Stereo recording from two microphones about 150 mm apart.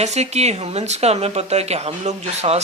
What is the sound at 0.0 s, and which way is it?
Speech, 50° right (ahead or behind).